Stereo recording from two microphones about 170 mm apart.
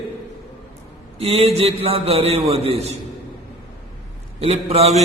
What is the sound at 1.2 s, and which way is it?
Mantra, 35° right (ahead or behind).